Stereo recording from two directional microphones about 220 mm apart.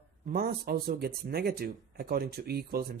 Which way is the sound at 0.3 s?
45° right (ahead or behind).